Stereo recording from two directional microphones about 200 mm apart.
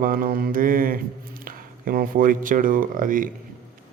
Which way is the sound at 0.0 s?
45° right (ahead or behind).